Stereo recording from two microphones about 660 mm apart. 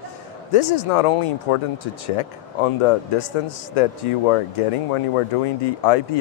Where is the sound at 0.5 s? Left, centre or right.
Left.